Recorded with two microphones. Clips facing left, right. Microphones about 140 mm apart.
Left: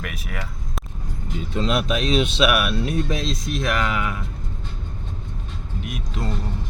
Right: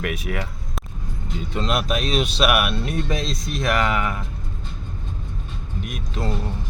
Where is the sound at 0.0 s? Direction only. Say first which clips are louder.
Right 6 dB; centre (ahead or behind).